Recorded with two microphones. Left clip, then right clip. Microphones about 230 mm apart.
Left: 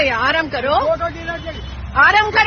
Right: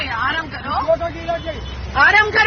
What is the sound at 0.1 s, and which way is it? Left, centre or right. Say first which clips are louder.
Vehicle: left 4 dB; left.